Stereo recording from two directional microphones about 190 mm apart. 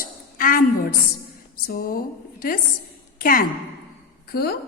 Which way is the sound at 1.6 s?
50° left (ahead or behind).